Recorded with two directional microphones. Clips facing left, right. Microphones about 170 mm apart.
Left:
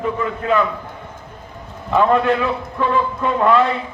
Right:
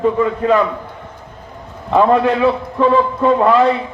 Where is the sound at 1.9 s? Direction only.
30° right (ahead or behind).